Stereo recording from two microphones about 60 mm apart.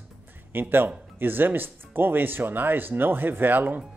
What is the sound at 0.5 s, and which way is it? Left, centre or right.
Speech, right.